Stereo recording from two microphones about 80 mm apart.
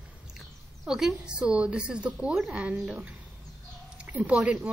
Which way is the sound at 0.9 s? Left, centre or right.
Centre.